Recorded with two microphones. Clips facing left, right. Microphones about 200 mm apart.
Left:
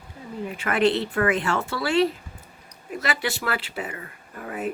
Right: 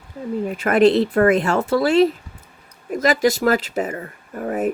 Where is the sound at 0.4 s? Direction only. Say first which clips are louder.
Right 7 dB; 40° right (ahead or behind).